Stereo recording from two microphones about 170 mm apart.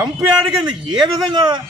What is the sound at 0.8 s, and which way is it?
Speech, 25° right (ahead or behind).